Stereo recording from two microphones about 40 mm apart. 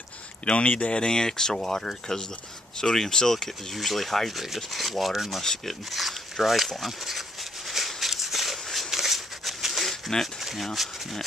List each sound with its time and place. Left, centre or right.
0.5 s speech: left
3.7 s rub: centre
5.4 s speech: centre
5.9 s speech: centre
6.8 s a sound: centre
10.4 s speech: centre